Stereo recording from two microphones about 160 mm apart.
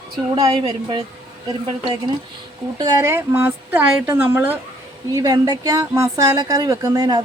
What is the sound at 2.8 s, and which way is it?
A woman's voice, 20° right (ahead or behind).